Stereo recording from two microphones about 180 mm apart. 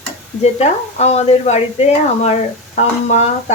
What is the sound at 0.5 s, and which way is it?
Speech, 35° left (ahead or behind).